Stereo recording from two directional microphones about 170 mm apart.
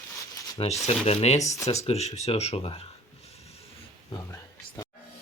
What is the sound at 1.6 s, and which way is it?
Speech, 40° left (ahead or behind).